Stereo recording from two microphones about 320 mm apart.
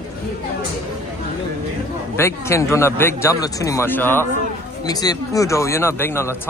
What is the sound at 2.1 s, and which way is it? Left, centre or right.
Speech, centre.